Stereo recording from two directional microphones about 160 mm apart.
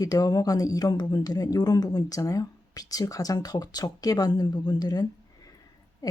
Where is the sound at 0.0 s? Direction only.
25° left (ahead or behind).